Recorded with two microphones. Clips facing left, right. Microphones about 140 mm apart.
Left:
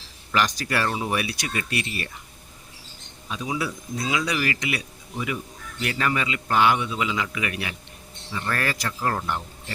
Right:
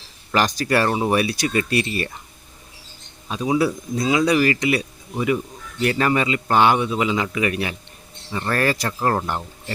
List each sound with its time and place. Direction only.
0.3 s speech: 35° right (ahead or behind)
3.2 s speech: 35° right (ahead or behind)